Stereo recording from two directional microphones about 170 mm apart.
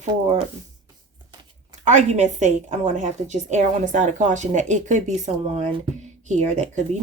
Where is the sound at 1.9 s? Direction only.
45° right (ahead or behind).